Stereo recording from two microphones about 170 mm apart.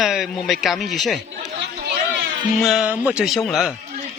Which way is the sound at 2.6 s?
Centre (ahead or behind).